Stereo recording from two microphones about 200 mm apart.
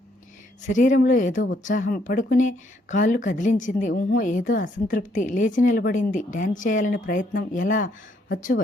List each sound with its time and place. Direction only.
0.7 s speech: 40° left (ahead or behind)